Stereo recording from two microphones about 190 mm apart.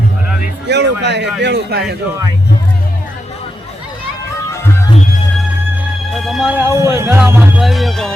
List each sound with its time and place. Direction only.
0.7 s speech: 65° right (ahead or behind)
6.1 s music: centre (ahead or behind)
6.7 s speech: 15° right (ahead or behind)